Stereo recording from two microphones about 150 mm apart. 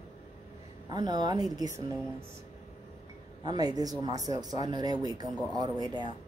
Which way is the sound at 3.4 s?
25° right (ahead or behind).